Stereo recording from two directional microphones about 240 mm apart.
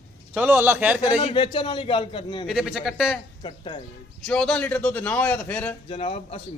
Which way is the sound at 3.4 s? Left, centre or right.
Left.